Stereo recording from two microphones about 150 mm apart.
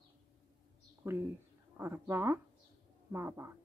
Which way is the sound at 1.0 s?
15° right (ahead or behind).